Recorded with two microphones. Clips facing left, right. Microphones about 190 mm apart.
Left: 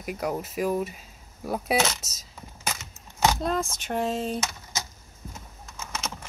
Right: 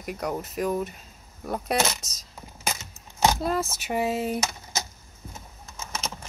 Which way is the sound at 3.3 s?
5° right (ahead or behind).